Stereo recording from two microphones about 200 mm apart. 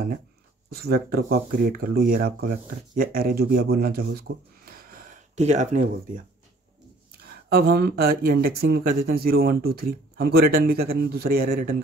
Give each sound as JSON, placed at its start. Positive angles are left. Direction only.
{"t": 0.7, "sound": "speech", "side_deg": -50}
{"t": 7.4, "sound": "speech", "side_deg": -50}